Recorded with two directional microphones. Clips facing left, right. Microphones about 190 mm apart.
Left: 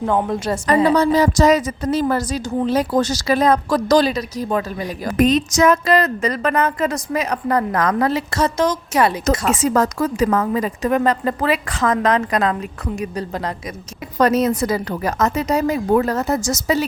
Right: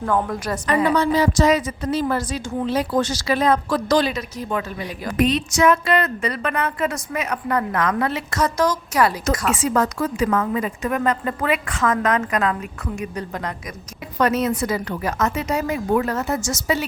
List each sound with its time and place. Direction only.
0.0 s a woman's voice: 20° left (ahead or behind)
9.5 s a woman's voice: 40° left (ahead or behind)